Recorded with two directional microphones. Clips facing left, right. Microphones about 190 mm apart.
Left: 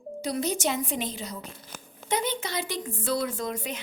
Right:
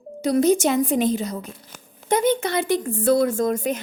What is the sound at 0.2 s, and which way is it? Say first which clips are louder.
A woman's voice: right 11 dB; 45° right (ahead or behind).